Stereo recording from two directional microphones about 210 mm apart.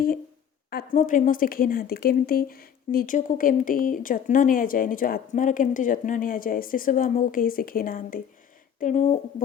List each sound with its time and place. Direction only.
0.9 s speech: 40° left (ahead or behind)